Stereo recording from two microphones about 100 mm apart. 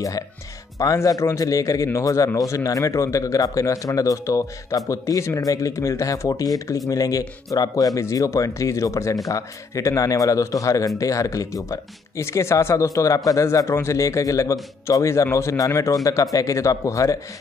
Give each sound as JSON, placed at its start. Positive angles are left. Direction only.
{"t": 0.7, "sound": "speech", "side_deg": 35}